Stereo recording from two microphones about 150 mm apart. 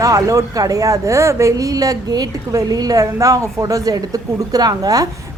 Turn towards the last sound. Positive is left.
turn(degrees=-25)  # may be behind; listen again after turning